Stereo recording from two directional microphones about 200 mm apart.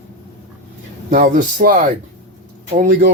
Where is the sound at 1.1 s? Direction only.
40° right (ahead or behind).